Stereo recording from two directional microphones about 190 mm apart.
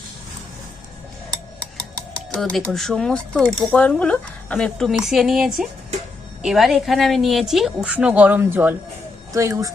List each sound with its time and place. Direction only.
2.3 s speech: 5° left (ahead or behind); by 9.7 s 20° right (ahead or behind)